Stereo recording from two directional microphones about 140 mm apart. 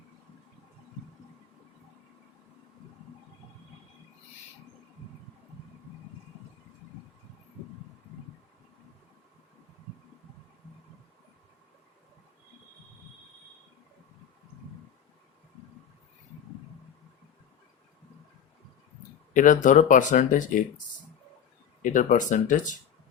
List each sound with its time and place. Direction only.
19.3 s speech: 65° left (ahead or behind)